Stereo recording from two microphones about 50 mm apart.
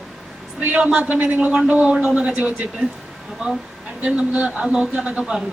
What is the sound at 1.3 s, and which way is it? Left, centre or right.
Speech, right.